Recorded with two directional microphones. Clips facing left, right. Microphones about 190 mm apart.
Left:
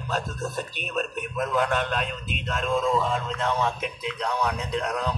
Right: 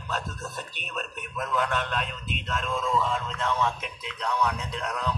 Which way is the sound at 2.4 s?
35° left (ahead or behind).